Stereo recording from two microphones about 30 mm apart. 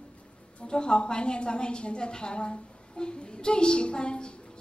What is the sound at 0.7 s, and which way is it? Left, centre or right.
A woman's voice, left.